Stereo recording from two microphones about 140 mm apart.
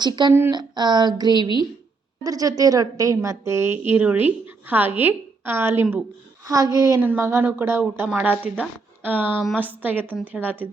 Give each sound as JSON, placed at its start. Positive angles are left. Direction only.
{"t": 0.0, "sound": "a woman's voice", "side_deg": -30}